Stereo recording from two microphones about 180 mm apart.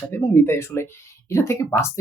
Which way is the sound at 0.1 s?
15° left (ahead or behind).